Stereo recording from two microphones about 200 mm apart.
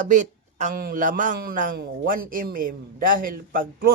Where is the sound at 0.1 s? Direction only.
40° right (ahead or behind).